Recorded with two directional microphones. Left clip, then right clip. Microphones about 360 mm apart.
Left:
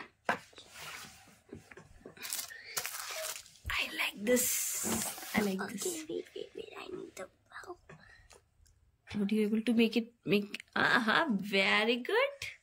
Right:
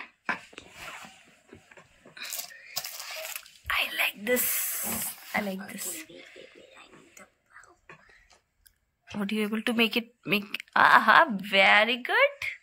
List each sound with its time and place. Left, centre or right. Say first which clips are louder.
3.3 s biting: right 9 dB; centre
4.2 s spray: right 3 dB; centre
6.7 s whispering: left 7 dB; centre
9.1 s speech: right 2 dB; centre